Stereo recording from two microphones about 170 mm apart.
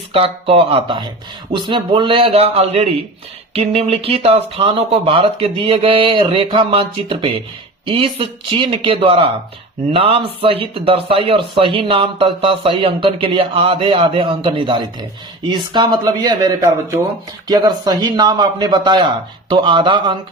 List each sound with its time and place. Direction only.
0.1 s speech: 35° right (ahead or behind)